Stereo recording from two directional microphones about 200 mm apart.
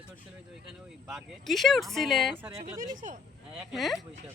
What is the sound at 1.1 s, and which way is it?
Speech, centre (ahead or behind).